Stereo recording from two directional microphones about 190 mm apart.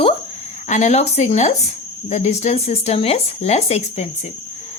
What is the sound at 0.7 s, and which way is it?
A woman's voice, 40° left (ahead or behind).